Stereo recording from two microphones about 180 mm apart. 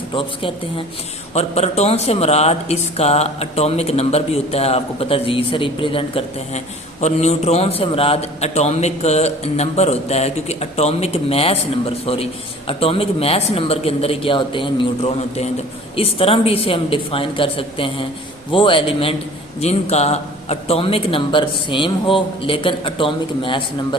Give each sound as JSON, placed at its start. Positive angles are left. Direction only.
{"t": 0.1, "sound": "a man's voice", "side_deg": 30}